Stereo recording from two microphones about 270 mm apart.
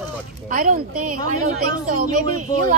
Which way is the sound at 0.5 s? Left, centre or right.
Right.